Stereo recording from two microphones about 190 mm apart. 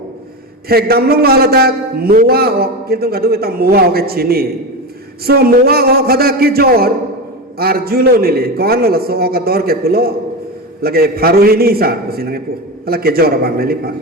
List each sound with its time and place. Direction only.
0.7 s a man's voice: 55° right (ahead or behind)